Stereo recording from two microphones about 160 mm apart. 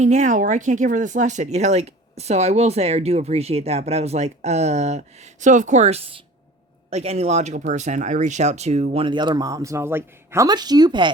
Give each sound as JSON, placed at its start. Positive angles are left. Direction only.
{"t": 0.0, "sound": "speech", "side_deg": -45}